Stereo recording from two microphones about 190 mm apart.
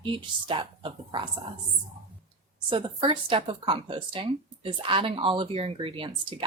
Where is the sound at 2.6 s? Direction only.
25° right (ahead or behind).